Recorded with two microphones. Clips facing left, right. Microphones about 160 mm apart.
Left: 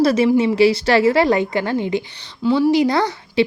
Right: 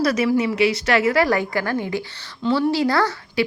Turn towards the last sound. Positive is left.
turn(degrees=20)  # may be behind; listen again after turning